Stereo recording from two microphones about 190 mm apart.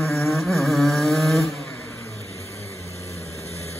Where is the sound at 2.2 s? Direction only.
15° left (ahead or behind).